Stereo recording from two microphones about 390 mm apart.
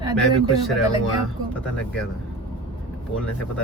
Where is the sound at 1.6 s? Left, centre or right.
Centre.